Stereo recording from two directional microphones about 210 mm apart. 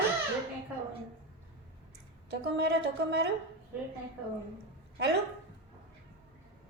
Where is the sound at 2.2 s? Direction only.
50° right (ahead or behind).